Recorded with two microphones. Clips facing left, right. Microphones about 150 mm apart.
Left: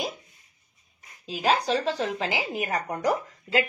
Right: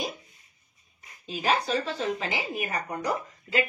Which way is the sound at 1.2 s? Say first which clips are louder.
Left 2 dB; 90° left.